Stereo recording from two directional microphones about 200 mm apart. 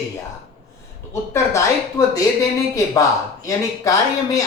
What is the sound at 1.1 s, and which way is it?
A man's voice, 15° left (ahead or behind).